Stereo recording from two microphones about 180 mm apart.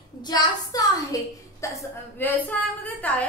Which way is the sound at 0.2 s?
20° left (ahead or behind).